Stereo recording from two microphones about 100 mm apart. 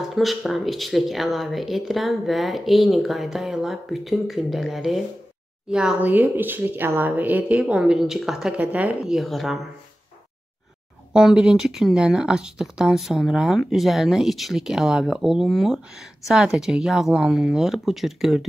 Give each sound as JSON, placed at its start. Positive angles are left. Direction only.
{"t": 0.1, "sound": "speech", "side_deg": 0}
{"t": 6.0, "sound": "speech", "side_deg": -15}
{"t": 9.1, "sound": "speech", "side_deg": 0}
{"t": 11.1, "sound": "speech", "side_deg": -5}